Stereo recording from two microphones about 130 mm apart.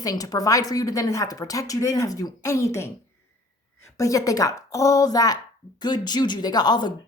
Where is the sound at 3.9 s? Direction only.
25° left (ahead or behind).